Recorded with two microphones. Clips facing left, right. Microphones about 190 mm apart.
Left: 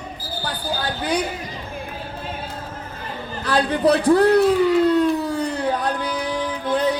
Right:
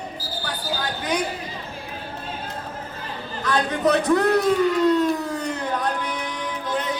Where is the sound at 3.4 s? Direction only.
35° left (ahead or behind).